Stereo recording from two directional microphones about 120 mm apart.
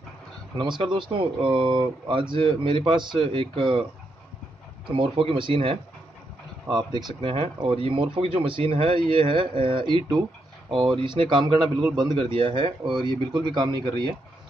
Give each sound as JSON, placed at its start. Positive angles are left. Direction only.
{"t": 0.6, "sound": "speech", "side_deg": -40}
{"t": 4.9, "sound": "speech", "side_deg": -50}
{"t": 6.7, "sound": "speech", "side_deg": -35}
{"t": 7.2, "sound": "speech", "side_deg": -50}
{"t": 11.0, "sound": "speech", "side_deg": -45}